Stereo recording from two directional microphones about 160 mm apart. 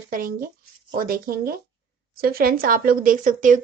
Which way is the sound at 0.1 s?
65° right (ahead or behind).